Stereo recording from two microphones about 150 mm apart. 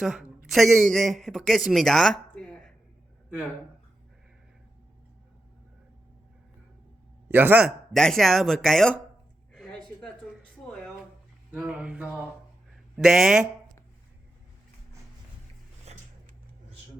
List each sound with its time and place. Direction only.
0.0 s speech: 5° right (ahead or behind)
7.3 s a man's voice: 15° right (ahead or behind)
7.9 s speech: 5° left (ahead or behind)
9.5 s a sound: 5° left (ahead or behind)
11.5 s speech: 10° right (ahead or behind)
15.9 s a sound: 45° right (ahead or behind)